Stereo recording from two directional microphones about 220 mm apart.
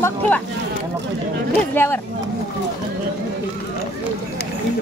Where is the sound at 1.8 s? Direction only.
10° left (ahead or behind).